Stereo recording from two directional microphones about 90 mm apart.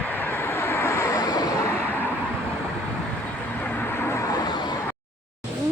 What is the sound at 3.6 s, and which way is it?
Vehicle, 20° left (ahead or behind).